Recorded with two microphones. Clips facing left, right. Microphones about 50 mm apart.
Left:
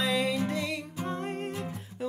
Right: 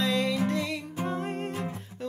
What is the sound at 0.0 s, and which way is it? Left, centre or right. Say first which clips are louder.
Music: right 1 dB; centre.